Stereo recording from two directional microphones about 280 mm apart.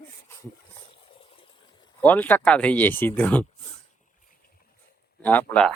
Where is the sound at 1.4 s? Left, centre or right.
Centre.